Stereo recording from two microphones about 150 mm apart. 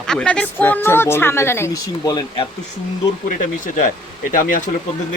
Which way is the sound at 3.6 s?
70° left (ahead or behind).